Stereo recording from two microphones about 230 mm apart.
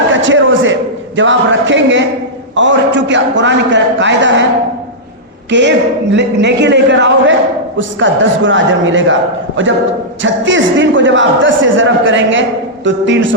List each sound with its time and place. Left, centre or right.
0.1 s a sound: right
2.6 s a man's voice: right
5.5 s a man's voice: right